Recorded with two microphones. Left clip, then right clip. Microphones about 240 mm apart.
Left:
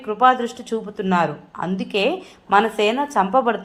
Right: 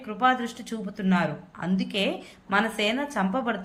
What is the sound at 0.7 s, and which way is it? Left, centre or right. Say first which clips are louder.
Speech: left 11 dB; left.